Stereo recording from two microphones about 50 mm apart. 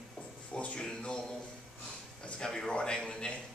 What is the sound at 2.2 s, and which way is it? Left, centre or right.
A man's voice, centre.